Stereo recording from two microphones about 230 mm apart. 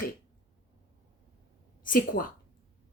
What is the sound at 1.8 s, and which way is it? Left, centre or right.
Speech, left.